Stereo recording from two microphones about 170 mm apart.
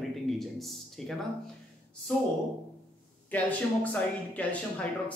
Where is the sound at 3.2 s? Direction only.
10° left (ahead or behind).